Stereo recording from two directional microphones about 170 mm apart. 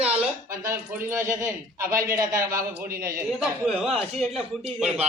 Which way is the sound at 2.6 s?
55° right (ahead or behind).